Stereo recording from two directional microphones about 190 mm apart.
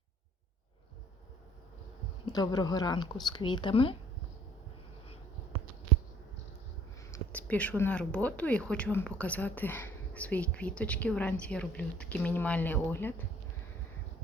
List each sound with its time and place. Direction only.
2.2 s speech: 20° left (ahead or behind)
7.1 s speech: 10° left (ahead or behind)